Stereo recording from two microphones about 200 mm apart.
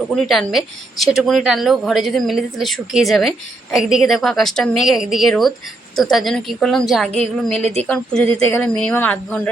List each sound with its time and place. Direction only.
0.2 s speech: centre (ahead or behind)
7.6 s speech: 30° right (ahead or behind)
7.9 s speech: 5° left (ahead or behind)